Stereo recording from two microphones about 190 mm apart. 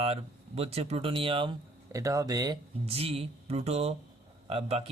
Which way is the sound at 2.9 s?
30° right (ahead or behind).